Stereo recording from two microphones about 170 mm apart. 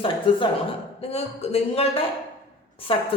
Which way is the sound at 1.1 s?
40° left (ahead or behind).